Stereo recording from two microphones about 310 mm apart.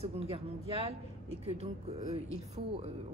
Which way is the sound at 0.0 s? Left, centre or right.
Centre.